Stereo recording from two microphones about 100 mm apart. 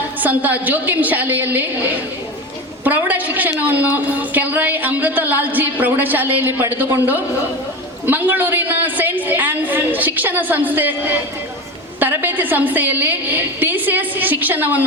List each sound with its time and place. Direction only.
0.2 s a woman's voice: 15° right (ahead or behind)